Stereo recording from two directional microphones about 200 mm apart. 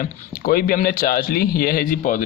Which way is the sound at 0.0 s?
45° left (ahead or behind).